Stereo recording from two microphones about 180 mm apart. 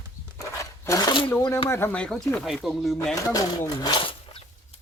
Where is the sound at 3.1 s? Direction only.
20° left (ahead or behind).